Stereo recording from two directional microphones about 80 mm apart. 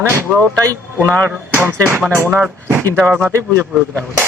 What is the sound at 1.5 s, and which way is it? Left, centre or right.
Speech, right.